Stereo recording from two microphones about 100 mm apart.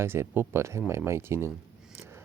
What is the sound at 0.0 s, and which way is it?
Speech, 25° right (ahead or behind).